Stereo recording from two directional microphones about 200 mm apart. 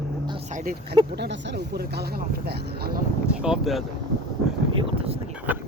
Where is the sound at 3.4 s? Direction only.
Centre (ahead or behind).